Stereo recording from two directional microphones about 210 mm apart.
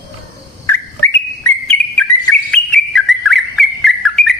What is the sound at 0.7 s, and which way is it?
Whistle, 10° left (ahead or behind).